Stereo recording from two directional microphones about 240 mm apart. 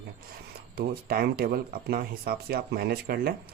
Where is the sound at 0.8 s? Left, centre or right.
Right.